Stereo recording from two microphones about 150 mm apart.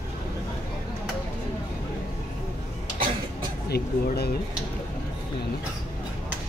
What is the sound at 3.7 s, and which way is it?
Speech, 90° left.